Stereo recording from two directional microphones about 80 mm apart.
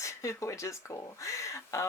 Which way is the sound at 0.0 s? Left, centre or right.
Left.